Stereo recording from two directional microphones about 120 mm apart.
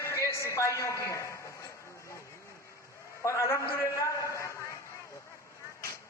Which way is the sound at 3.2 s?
25° left (ahead or behind).